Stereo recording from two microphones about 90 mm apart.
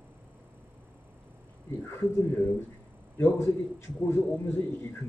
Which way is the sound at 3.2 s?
25° left (ahead or behind).